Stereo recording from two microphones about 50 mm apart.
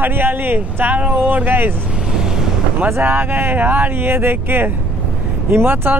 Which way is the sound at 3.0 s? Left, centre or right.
Right.